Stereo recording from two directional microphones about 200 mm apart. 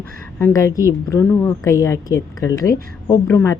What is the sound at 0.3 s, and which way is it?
A woman's voice, 15° left (ahead or behind).